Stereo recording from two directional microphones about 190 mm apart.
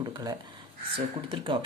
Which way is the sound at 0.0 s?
20° right (ahead or behind).